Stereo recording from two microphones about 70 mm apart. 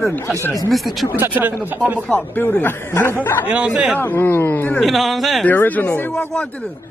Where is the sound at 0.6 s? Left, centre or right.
Centre.